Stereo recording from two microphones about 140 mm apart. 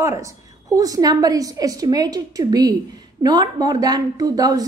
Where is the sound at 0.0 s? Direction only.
25° right (ahead or behind).